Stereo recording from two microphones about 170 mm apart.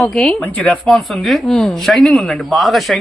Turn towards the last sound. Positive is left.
turn(degrees=0)  # may be behind; listen again after turning